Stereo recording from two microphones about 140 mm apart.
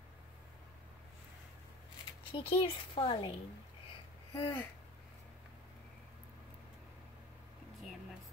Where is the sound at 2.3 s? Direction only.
40° left (ahead or behind).